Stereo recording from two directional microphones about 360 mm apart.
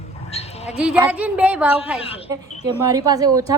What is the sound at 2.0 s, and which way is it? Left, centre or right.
Speech, centre.